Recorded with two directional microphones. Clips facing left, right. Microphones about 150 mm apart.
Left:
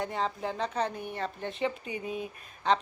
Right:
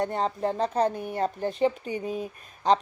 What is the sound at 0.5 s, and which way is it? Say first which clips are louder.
Speech: right 6 dB; 35° right (ahead or behind).